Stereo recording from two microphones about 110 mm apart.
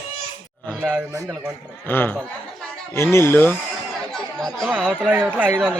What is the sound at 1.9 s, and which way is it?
Speech, 20° left (ahead or behind).